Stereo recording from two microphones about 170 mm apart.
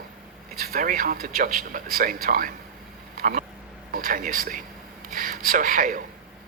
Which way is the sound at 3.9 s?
55° right (ahead or behind).